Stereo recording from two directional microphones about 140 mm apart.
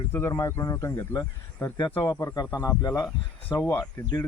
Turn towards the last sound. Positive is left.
turn(degrees=25)  # may be behind; listen again after turning